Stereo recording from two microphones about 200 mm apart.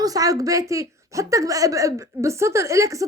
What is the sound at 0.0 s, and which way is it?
A woman's voice, 15° right (ahead or behind).